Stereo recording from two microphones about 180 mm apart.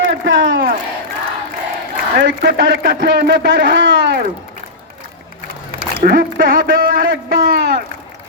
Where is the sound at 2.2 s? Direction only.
60° right (ahead or behind); by 4.2 s 80° right.